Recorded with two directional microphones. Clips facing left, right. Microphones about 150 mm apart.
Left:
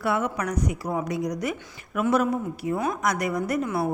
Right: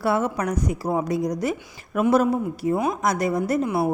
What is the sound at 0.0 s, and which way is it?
A woman's voice, 30° right (ahead or behind).